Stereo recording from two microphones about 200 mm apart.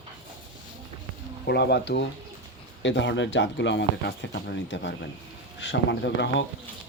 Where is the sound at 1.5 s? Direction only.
55° left (ahead or behind).